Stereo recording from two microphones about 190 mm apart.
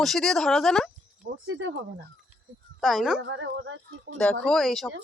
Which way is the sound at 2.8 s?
Centre (ahead or behind).